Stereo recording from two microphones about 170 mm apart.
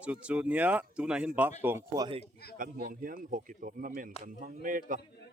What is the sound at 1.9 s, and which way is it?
Speech, 25° right (ahead or behind).